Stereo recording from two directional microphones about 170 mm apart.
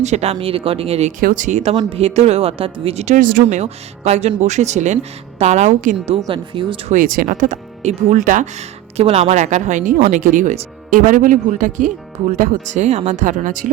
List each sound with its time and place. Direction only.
0.0 s speech: 40° right (ahead or behind)
1.2 s speech: 50° right (ahead or behind)
3.4 s speech: 40° right (ahead or behind)
6.3 s speech: 30° right (ahead or behind)
6.9 s speech: 55° right (ahead or behind)